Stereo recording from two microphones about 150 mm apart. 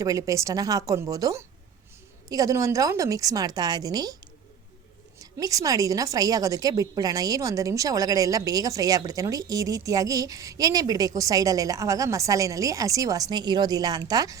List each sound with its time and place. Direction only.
0.0 s a woman's voice: 20° right (ahead or behind)
5.2 s a woman's voice: 25° right (ahead or behind)